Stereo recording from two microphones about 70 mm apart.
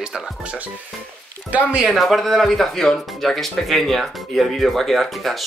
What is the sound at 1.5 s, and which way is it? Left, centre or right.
Speech, centre.